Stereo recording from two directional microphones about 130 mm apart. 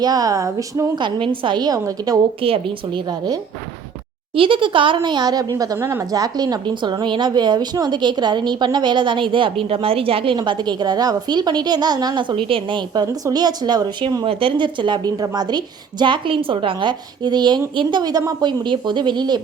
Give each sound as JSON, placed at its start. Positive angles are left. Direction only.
{"t": 0.0, "sound": "speech", "side_deg": -30}
{"t": 0.9, "sound": "speech", "side_deg": -40}
{"t": 2.4, "sound": "speech", "side_deg": -45}
{"t": 14.3, "sound": "speech", "side_deg": -45}